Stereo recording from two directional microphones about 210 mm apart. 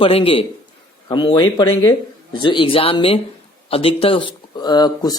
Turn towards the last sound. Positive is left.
turn(degrees=20)  # may be behind; listen again after turning